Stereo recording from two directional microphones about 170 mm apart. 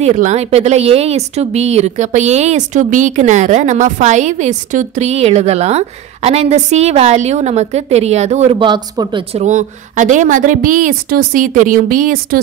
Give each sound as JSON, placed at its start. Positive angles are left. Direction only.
{"t": 0.0, "sound": "speech", "side_deg": -45}
{"t": 9.3, "sound": "a woman's voice", "side_deg": -40}